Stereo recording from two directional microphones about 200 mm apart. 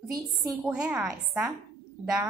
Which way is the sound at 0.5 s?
5° right (ahead or behind).